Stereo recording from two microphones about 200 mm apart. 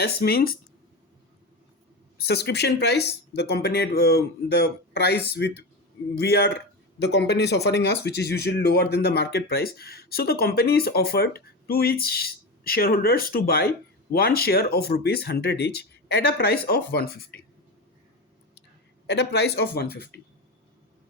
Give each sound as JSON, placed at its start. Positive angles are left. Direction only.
{"t": 0.0, "sound": "speech", "side_deg": 50}
{"t": 2.1, "sound": "a man's voice", "side_deg": 55}
{"t": 19.0, "sound": "a man's voice", "side_deg": 55}